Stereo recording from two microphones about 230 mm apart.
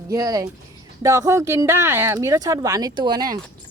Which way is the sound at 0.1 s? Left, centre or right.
Centre.